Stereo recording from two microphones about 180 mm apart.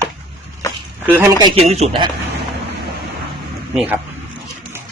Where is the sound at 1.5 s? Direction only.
35° right (ahead or behind).